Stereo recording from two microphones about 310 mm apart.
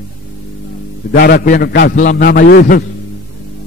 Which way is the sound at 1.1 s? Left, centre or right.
Left.